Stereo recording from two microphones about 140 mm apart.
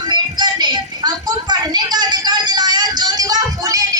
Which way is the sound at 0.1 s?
30° right (ahead or behind).